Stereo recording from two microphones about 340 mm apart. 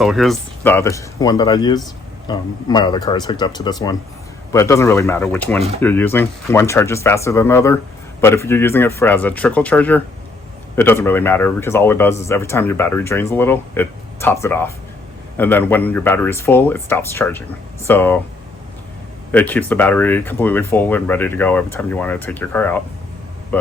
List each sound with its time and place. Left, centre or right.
0.0 s speech: centre
5.5 s speech: centre
5.8 s speech: centre
19.3 s speech: centre